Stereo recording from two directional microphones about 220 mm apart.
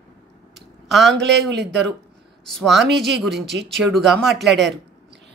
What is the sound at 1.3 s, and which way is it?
Speech, 50° right (ahead or behind).